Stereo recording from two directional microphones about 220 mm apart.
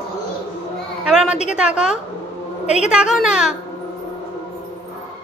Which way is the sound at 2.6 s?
30° left (ahead or behind).